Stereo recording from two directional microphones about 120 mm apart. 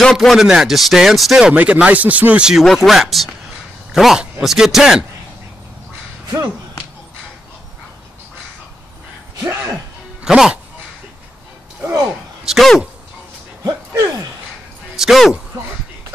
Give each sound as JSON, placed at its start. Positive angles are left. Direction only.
{"t": 0.0, "sound": "speech", "side_deg": 0}
{"t": 9.4, "sound": "a sound", "side_deg": -20}
{"t": 10.2, "sound": "speech", "side_deg": -5}
{"t": 12.1, "sound": "speech", "side_deg": 0}
{"t": 13.7, "sound": "a sound", "side_deg": -35}
{"t": 15.0, "sound": "speech", "side_deg": 0}